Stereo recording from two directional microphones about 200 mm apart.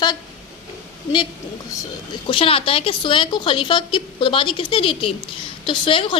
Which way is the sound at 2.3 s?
25° left (ahead or behind).